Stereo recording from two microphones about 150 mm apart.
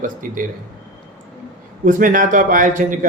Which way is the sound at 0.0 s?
60° right (ahead or behind).